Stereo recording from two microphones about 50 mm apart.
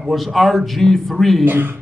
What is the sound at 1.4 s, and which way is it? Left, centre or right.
Speech, right.